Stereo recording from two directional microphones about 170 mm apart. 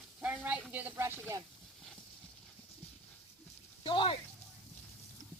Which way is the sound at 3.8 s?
30° left (ahead or behind).